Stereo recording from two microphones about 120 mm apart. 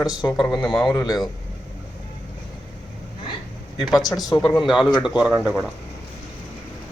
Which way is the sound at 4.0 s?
30° left (ahead or behind).